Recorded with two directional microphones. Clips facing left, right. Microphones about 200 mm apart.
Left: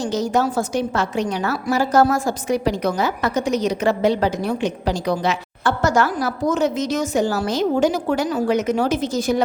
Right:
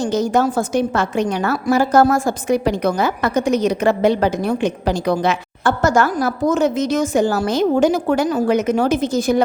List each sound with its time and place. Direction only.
0.0 s a woman's voice: 55° right (ahead or behind)